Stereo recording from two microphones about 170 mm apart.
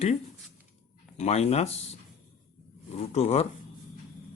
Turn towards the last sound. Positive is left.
turn(degrees=40)  # may be behind; listen again after turning